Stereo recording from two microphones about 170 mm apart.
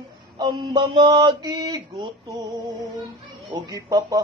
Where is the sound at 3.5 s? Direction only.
25° right (ahead or behind).